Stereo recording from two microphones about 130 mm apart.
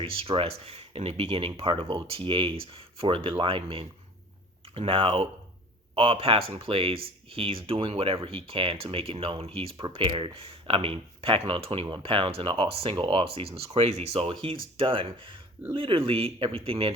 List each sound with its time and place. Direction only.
0.0 s speech: 45° right (ahead or behind)